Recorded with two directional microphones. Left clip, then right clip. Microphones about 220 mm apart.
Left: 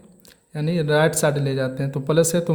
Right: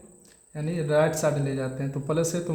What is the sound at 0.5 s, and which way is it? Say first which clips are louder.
Speech: left 4 dB; 45° left (ahead or behind).